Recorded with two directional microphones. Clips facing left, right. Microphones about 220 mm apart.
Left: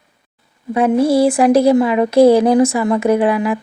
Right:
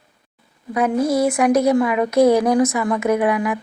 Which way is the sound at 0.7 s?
25° left (ahead or behind).